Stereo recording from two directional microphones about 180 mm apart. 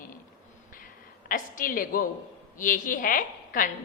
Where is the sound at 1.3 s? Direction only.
50° left (ahead or behind).